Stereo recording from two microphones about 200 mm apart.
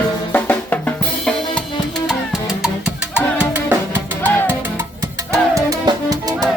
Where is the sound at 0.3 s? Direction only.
10° left (ahead or behind).